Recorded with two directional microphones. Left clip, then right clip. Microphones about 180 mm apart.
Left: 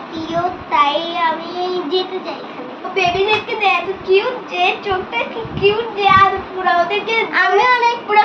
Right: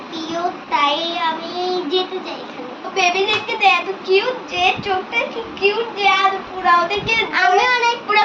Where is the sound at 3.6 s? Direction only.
10° right (ahead or behind).